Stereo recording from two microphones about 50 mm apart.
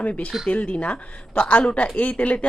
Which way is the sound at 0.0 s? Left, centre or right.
Left.